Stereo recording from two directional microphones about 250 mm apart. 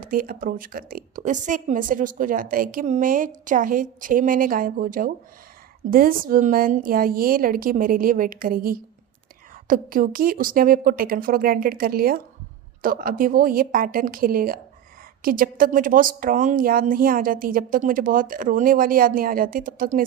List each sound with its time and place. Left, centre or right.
0.0 s a woman's voice: right